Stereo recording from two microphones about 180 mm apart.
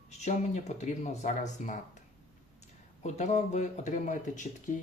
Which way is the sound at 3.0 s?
40° left (ahead or behind).